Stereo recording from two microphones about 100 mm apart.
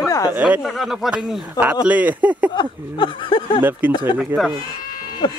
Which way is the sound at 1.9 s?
15° right (ahead or behind).